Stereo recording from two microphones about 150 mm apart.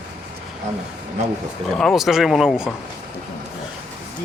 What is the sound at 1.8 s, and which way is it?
Speech, centre (ahead or behind).